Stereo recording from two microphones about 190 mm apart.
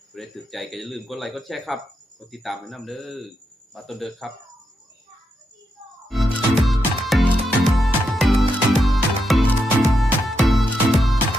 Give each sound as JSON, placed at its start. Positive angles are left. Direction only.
{"t": 0.1, "sound": "speech", "side_deg": 0}
{"t": 6.1, "sound": "music", "side_deg": 0}